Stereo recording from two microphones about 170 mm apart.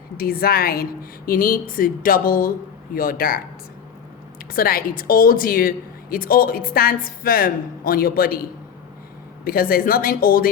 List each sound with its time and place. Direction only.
0.2 s a woman's voice: 60° left (ahead or behind)
4.5 s a woman's voice: 60° left (ahead or behind)